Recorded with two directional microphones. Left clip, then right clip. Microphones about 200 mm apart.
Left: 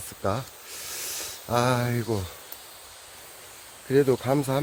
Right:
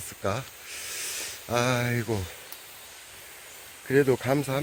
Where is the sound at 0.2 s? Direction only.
10° left (ahead or behind).